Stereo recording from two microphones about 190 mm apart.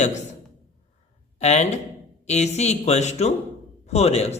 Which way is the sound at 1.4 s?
35° left (ahead or behind).